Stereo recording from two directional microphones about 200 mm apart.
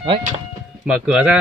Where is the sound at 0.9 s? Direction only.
5° right (ahead or behind).